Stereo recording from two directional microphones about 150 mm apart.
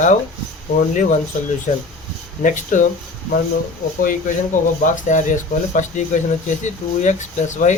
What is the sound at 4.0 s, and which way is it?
Speech, 65° left (ahead or behind).